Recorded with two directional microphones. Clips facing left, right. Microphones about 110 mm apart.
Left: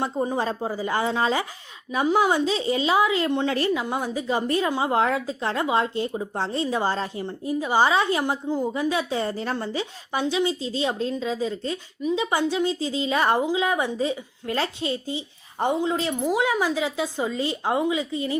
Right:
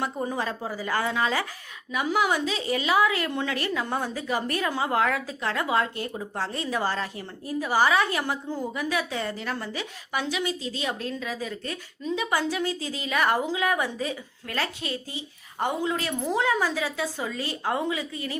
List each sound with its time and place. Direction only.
0.0 s a woman's voice: 25° left (ahead or behind)
3.8 s a woman's voice: 15° left (ahead or behind)
16.2 s a woman's voice: 15° left (ahead or behind)